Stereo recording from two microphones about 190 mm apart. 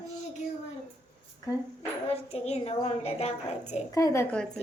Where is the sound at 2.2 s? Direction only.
35° left (ahead or behind).